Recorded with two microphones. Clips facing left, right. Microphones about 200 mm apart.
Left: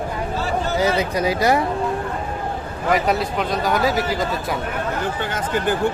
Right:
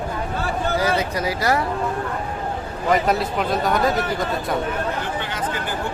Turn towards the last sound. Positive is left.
turn(degrees=5)  # may be behind; listen again after turning